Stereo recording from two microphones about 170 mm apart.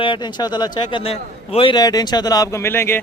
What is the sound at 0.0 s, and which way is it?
A man's voice, 25° left (ahead or behind).